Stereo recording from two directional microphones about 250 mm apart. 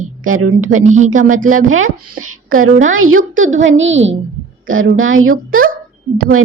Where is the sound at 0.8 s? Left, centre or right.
Right.